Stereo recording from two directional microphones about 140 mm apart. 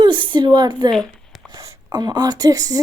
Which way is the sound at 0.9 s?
5° left (ahead or behind).